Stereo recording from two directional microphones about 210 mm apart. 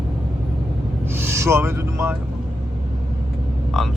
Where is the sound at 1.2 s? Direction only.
10° right (ahead or behind).